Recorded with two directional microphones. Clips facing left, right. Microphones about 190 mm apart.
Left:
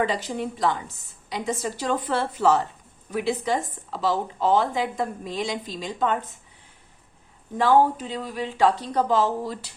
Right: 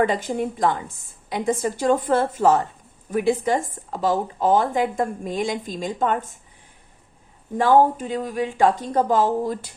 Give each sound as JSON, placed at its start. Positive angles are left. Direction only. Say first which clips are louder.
{"t": 0.0, "sound": "speech", "louder": "right 4 dB", "side_deg": -50}
{"t": 7.6, "sound": "speech", "louder": "right 2 dB", "side_deg": -45}